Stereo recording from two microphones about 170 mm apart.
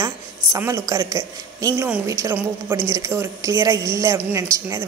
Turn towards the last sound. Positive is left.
turn(degrees=-15)  # may be behind; listen again after turning